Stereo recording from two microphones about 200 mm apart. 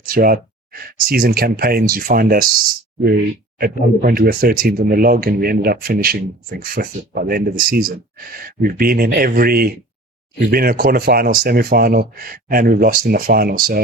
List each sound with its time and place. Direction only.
0.0 s speech: 45° right (ahead or behind)